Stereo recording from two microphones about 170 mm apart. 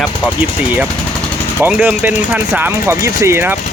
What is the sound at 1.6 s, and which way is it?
Speech, 10° right (ahead or behind).